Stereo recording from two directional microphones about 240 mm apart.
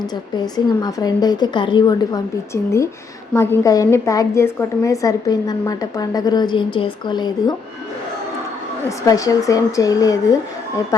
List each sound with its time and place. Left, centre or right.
0.3 s a woman's voice: centre
3.3 s a woman's voice: centre
9.0 s a woman's voice: centre